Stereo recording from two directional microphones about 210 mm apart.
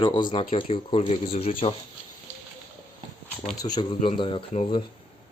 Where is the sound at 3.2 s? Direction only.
Centre (ahead or behind).